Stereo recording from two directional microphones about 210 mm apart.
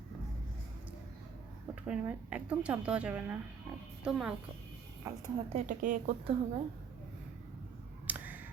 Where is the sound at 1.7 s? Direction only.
5° right (ahead or behind).